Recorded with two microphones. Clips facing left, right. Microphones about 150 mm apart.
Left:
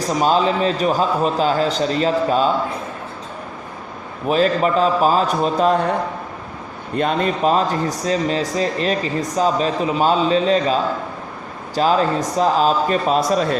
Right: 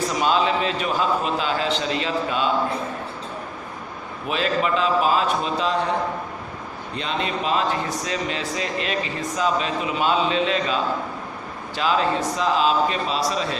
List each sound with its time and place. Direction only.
0.1 s a man's voice: 40° left (ahead or behind)
4.3 s a man's voice: 40° left (ahead or behind)
6.9 s a man's voice: 50° left (ahead or behind)